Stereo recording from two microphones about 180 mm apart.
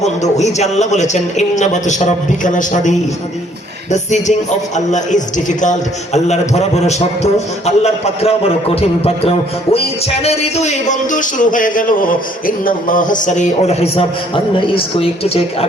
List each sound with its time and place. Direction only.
0.0 s a man's voice: 40° left (ahead or behind)
3.9 s a man's voice: 40° left (ahead or behind)